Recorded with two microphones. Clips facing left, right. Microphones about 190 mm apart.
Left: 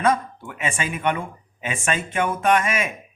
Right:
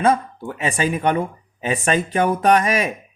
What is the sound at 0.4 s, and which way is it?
Speech, 35° right (ahead or behind).